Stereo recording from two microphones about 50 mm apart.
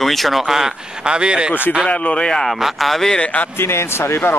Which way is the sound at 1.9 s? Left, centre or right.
Left.